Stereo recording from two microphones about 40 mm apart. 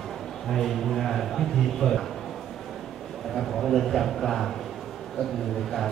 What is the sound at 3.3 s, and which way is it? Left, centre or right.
A man's voice, centre.